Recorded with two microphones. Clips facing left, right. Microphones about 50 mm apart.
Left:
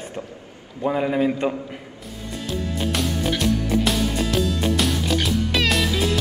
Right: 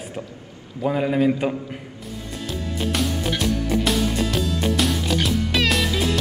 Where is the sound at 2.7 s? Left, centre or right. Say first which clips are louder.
Right 2 dB; centre.